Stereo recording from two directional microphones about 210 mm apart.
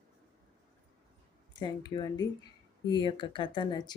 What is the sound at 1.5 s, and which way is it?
Speech, 20° left (ahead or behind).